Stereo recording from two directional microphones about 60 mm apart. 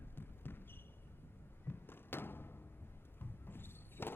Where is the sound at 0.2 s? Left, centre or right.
Left.